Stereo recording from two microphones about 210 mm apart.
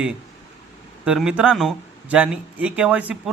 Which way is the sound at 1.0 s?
5° right (ahead or behind).